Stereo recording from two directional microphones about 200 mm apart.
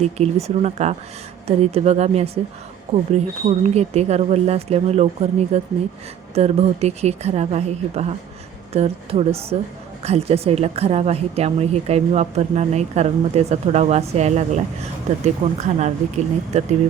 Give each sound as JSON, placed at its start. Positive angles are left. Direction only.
{"t": 0.0, "sound": "speech", "side_deg": -30}